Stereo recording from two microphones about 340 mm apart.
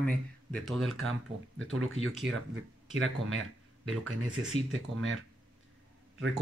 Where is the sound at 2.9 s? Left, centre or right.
Right.